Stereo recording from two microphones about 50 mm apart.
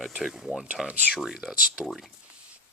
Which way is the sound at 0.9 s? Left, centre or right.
Right.